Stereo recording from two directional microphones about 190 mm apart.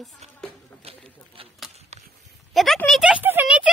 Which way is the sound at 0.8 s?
30° right (ahead or behind).